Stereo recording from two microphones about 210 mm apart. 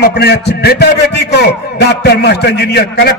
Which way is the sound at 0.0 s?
50° left (ahead or behind).